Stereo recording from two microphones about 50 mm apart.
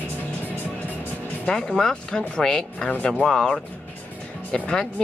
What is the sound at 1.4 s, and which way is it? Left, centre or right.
Speech, centre.